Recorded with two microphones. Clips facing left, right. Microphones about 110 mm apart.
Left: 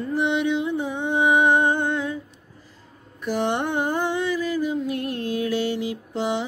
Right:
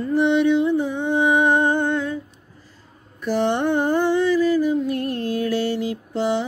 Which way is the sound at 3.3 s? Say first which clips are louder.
Right 4 dB; 15° left (ahead or behind).